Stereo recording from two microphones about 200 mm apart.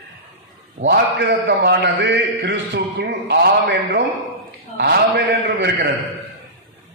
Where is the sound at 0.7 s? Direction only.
60° right (ahead or behind).